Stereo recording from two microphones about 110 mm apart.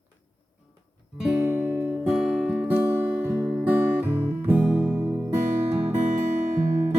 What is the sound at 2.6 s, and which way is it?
Music, 20° right (ahead or behind).